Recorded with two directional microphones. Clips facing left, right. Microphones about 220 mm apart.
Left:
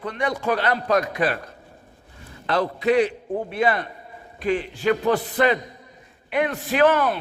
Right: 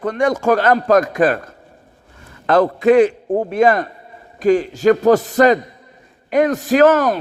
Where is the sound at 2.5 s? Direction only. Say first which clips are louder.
Right 8 dB; 50° right (ahead or behind).